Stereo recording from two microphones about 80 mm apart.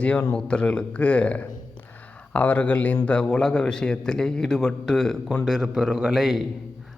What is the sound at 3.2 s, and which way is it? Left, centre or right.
A man's voice, centre.